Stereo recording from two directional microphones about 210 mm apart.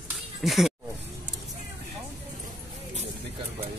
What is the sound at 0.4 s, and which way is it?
Speech, centre (ahead or behind).